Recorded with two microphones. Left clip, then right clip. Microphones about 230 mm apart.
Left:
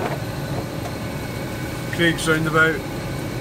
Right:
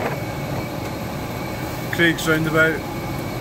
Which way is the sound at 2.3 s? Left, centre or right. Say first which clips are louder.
Even; centre.